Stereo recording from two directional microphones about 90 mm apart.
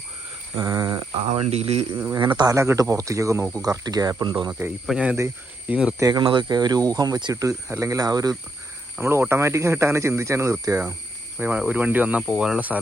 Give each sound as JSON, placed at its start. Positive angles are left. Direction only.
{"t": 0.5, "sound": "speech", "side_deg": -45}
{"t": 1.1, "sound": "speech", "side_deg": -80}
{"t": 2.1, "sound": "speech", "side_deg": -55}
{"t": 2.6, "sound": "speech", "side_deg": -35}
{"t": 3.6, "sound": "speech", "side_deg": -45}
{"t": 4.9, "sound": "speech", "side_deg": -10}
{"t": 6.0, "sound": "speech", "side_deg": -50}
{"t": 9.0, "sound": "speech", "side_deg": -30}
{"t": 11.3, "sound": "speech", "side_deg": -15}